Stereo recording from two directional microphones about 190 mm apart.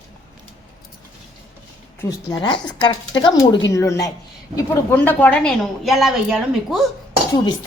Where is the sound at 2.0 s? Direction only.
20° left (ahead or behind); by 6.8 s centre (ahead or behind).